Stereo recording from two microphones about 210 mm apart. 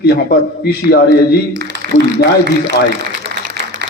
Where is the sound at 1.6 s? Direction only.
50° right (ahead or behind).